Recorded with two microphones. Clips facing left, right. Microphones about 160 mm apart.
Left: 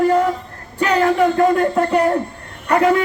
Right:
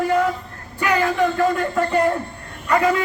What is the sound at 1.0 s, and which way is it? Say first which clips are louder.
Speech: left 5 dB; 40° left (ahead or behind).